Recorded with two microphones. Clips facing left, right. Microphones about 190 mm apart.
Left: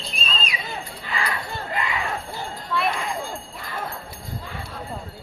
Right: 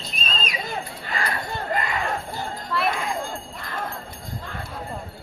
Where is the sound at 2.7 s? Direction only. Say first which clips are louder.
Even; centre (ahead or behind).